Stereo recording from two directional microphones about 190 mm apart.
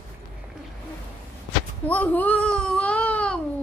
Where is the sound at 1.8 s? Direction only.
10° left (ahead or behind).